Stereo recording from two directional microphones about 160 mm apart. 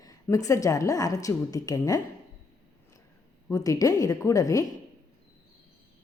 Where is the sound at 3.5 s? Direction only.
20° left (ahead or behind).